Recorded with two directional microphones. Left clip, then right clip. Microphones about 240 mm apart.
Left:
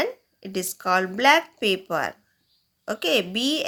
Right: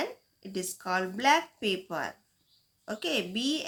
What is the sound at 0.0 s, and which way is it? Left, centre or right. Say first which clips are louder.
A woman's voice: left 8 dB; left.